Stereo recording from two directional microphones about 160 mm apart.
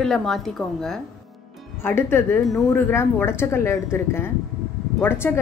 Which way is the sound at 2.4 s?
Centre (ahead or behind).